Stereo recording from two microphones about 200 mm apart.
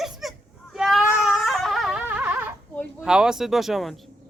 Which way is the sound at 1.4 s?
Centre (ahead or behind).